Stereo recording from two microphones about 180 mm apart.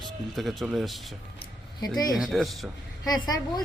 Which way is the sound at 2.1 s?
Centre (ahead or behind).